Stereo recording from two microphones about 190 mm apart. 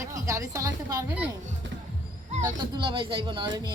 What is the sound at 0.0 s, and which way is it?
Speech, 15° right (ahead or behind).